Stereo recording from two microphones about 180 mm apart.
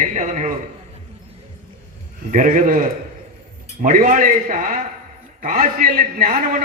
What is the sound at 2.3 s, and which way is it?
A man's voice, 45° right (ahead or behind).